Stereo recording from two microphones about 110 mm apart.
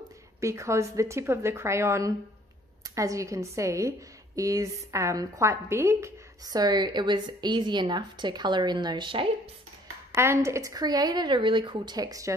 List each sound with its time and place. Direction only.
0.4 s a woman's voice: 25° right (ahead or behind); by 9.3 s 50° right (ahead or behind)
10.1 s a woman's voice: 25° right (ahead or behind)